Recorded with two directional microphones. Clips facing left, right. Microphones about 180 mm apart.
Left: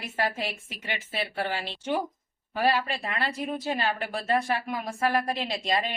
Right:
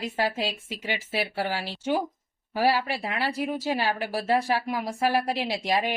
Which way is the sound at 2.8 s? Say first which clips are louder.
Right 2 dB; 15° right (ahead or behind).